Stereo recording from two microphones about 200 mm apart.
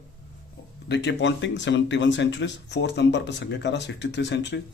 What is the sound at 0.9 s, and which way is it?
Speech, 60° left (ahead or behind).